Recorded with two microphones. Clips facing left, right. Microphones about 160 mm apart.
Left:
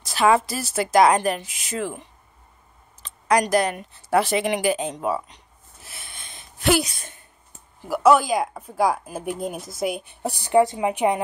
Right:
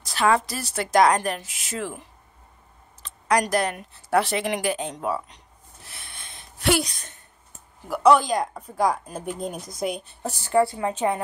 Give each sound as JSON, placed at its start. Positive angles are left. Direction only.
{"t": 0.0, "sound": "speech", "side_deg": 5}